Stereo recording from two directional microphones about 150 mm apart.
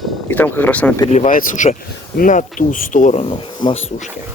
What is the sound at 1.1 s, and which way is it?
Speech, 60° left (ahead or behind).